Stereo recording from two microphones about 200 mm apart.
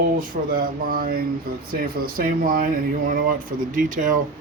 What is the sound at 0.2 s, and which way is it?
Speech, 45° right (ahead or behind).